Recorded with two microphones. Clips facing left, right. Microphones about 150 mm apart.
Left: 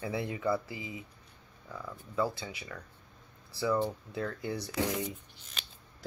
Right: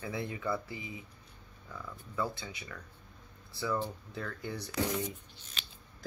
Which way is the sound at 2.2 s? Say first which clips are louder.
Left 3 dB; 30° left (ahead or behind).